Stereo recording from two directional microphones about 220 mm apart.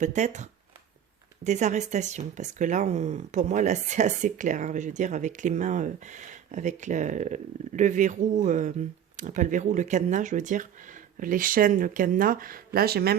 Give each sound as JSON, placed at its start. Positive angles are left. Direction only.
{"t": 0.0, "sound": "speech", "side_deg": -35}
{"t": 1.5, "sound": "speech", "side_deg": -35}